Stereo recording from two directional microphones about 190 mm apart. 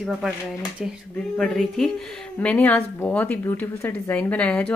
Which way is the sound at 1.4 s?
Centre (ahead or behind).